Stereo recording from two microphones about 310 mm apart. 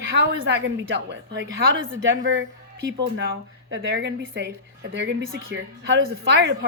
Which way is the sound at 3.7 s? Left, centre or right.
Right.